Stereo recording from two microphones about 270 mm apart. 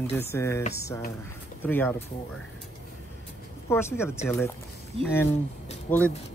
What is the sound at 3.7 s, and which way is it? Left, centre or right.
Speech, centre.